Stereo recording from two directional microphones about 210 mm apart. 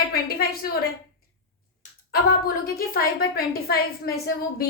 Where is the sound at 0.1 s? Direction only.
45° left (ahead or behind).